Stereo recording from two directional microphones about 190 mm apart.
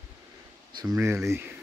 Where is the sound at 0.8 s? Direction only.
15° right (ahead or behind).